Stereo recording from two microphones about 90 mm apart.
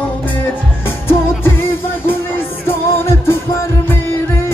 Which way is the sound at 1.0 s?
25° left (ahead or behind).